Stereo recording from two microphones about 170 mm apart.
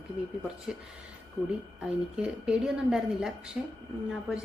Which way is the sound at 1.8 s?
5° right (ahead or behind).